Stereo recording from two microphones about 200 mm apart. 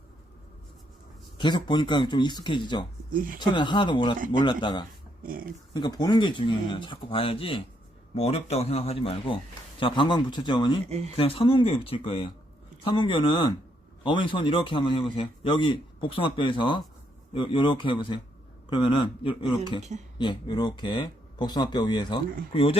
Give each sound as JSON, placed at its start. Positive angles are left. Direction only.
{"t": 1.4, "sound": "a man's voice", "side_deg": 20}
{"t": 3.1, "sound": "speech", "side_deg": -45}
{"t": 3.3, "sound": "a man's voice", "side_deg": 20}
{"t": 5.2, "sound": "speech", "side_deg": -45}
{"t": 5.7, "sound": "a man's voice", "side_deg": 20}
{"t": 10.8, "sound": "speech", "side_deg": -30}
{"t": 11.2, "sound": "a man's voice", "side_deg": 30}